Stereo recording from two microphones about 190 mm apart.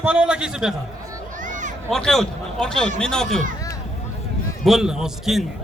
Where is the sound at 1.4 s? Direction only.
40° right (ahead or behind).